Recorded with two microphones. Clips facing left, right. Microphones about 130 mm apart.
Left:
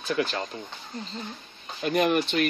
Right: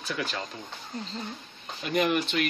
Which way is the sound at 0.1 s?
30° left (ahead or behind).